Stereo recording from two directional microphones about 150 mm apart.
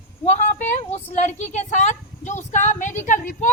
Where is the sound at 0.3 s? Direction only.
50° left (ahead or behind).